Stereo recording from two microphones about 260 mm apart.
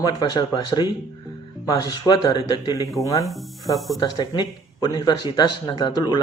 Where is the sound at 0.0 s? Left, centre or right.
Centre.